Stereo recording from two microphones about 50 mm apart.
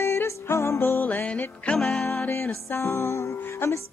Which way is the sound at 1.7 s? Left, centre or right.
Centre.